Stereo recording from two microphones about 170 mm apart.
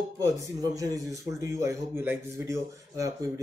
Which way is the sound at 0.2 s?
20° right (ahead or behind).